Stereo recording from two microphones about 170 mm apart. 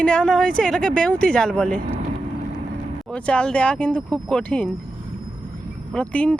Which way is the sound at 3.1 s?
5° left (ahead or behind).